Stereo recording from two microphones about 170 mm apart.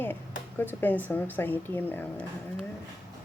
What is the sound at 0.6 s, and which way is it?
Speech, 10° left (ahead or behind).